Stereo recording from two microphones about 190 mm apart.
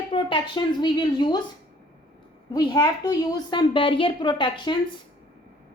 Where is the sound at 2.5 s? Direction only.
20° left (ahead or behind).